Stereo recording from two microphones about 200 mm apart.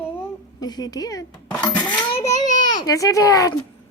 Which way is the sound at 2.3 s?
40° left (ahead or behind).